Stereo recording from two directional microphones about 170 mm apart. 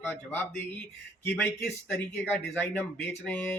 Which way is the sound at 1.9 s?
10° left (ahead or behind).